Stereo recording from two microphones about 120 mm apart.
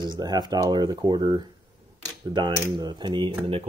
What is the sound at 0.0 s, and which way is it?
Speech, 35° right (ahead or behind).